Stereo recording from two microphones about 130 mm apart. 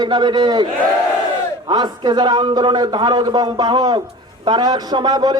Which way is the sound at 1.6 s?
35° right (ahead or behind).